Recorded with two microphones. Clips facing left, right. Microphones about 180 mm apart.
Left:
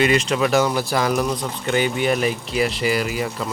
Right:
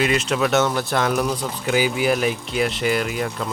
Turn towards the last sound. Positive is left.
turn(degrees=0)  # may be behind; listen again after turning